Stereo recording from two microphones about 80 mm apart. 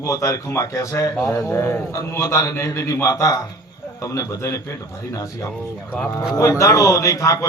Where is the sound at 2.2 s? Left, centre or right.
Left.